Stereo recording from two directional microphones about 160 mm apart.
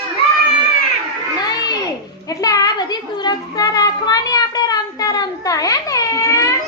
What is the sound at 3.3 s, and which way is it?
Child singing, 25° left (ahead or behind).